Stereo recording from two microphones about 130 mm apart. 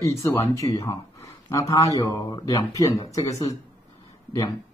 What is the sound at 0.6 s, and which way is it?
Speech, 35° left (ahead or behind).